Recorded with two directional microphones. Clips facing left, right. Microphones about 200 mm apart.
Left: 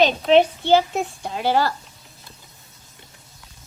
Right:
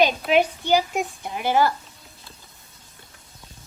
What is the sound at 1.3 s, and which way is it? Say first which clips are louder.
Speech: even; 15° right (ahead or behind).